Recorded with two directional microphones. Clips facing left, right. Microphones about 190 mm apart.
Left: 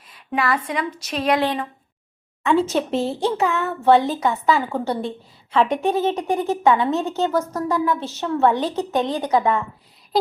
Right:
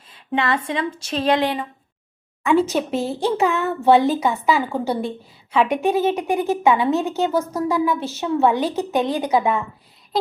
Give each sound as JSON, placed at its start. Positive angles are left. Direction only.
{"t": 0.1, "sound": "a woman's voice", "side_deg": -25}
{"t": 2.5, "sound": "speech", "side_deg": -5}
{"t": 3.3, "sound": "a woman's voice", "side_deg": -15}